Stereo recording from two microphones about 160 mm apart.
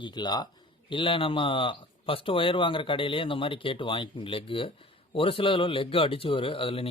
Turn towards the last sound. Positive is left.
turn(degrees=35)  # may be behind; listen again after turning